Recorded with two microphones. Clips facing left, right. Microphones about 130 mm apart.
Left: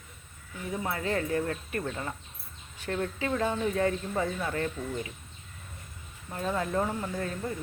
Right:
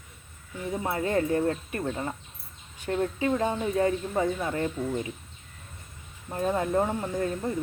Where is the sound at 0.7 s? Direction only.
25° right (ahead or behind).